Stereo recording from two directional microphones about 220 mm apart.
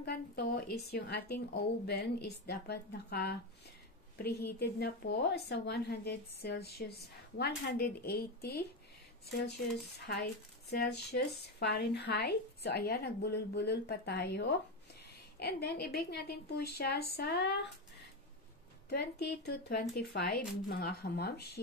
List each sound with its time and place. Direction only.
0.0 s a woman's voice: 45° left (ahead or behind)
9.9 s a woman's voice: 50° left (ahead or behind)
18.9 s a woman's voice: 45° left (ahead or behind)